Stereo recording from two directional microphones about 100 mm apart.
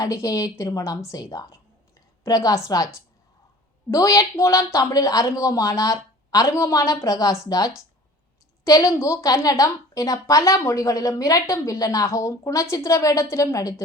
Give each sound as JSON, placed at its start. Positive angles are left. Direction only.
{"t": 0.0, "sound": "a woman's voice", "side_deg": 35}